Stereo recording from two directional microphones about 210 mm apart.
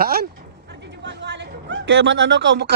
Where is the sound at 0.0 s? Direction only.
50° right (ahead or behind).